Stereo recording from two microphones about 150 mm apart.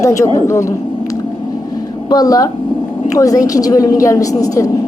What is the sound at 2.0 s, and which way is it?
A woman's voice, 25° left (ahead or behind).